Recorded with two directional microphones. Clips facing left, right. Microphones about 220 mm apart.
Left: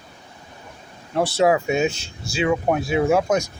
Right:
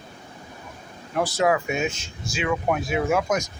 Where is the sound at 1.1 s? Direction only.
25° left (ahead or behind).